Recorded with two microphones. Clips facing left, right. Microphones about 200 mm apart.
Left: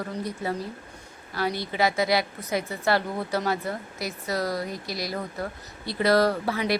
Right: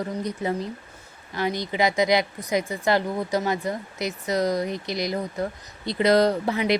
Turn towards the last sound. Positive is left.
turn(degrees=-20)  # may be behind; listen again after turning